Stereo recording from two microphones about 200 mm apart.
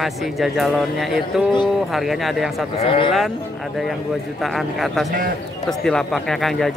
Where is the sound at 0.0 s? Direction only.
Centre (ahead or behind).